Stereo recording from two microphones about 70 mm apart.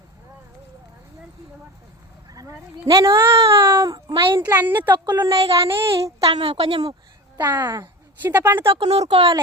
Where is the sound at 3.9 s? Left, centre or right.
Right.